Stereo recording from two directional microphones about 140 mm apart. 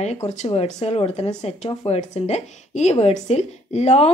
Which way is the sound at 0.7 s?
50° left (ahead or behind).